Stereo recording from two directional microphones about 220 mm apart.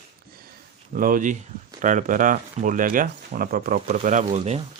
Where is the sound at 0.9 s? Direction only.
40° right (ahead or behind).